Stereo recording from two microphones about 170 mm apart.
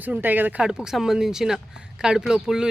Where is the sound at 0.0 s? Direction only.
10° right (ahead or behind).